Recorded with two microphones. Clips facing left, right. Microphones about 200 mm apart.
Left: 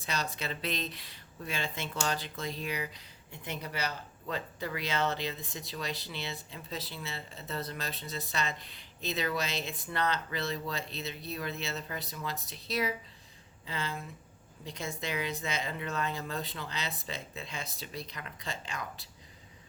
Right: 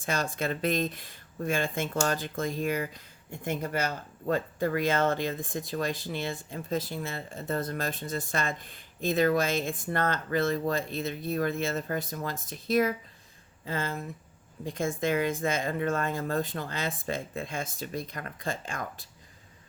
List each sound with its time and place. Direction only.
0.0 s speech: 50° right (ahead or behind)